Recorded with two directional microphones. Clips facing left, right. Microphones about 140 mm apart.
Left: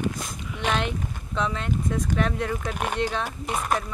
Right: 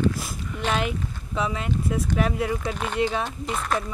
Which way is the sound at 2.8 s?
45° left (ahead or behind).